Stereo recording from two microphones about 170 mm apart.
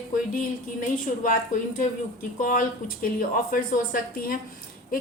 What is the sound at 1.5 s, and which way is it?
A woman's voice, 50° left (ahead or behind).